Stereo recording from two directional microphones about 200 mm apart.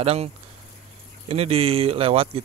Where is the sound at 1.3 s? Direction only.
30° right (ahead or behind).